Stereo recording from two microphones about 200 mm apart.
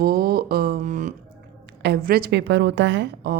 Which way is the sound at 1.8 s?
50° right (ahead or behind).